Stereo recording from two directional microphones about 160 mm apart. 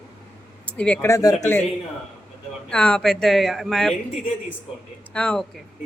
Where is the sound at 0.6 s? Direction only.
10° left (ahead or behind).